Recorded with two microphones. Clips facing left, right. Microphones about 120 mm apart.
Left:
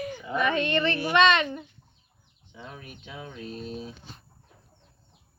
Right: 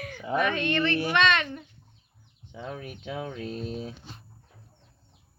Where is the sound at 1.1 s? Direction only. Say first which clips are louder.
Left 8 dB; 5° left (ahead or behind).